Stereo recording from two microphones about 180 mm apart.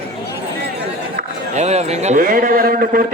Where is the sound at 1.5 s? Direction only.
40° right (ahead or behind).